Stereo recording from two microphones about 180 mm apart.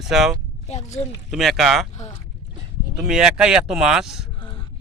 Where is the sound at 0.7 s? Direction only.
40° left (ahead or behind).